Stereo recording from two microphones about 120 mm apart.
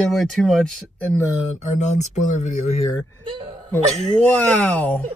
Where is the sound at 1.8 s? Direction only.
80° left.